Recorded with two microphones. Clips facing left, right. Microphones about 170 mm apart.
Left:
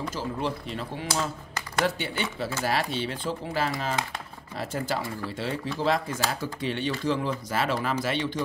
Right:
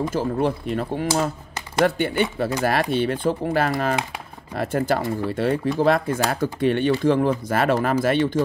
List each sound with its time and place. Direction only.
0.1 s speech: 55° right (ahead or behind)